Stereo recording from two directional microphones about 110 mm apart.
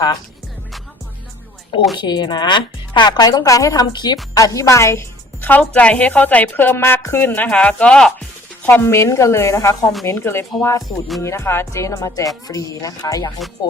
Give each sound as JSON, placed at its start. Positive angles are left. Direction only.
{"t": 2.0, "sound": "a woman's voice", "side_deg": 40}
{"t": 8.6, "sound": "a woman's voice", "side_deg": 20}